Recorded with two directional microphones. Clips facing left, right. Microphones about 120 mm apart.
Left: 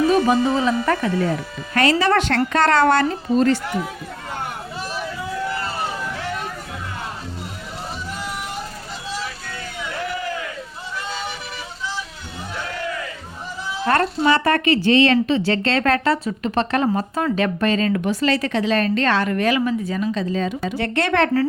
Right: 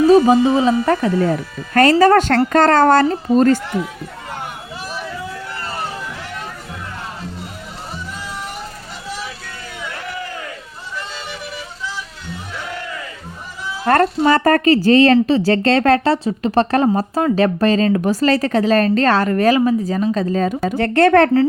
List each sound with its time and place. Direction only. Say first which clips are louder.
0.1 s speech: right 6 dB; 25° right (ahead or behind)
1.7 s speech: right 6 dB; 45° right (ahead or behind)
13.8 s speech: right 4 dB; 45° right (ahead or behind)